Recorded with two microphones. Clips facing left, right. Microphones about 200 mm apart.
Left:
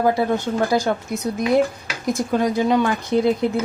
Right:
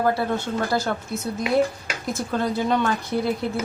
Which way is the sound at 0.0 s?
15° left (ahead or behind).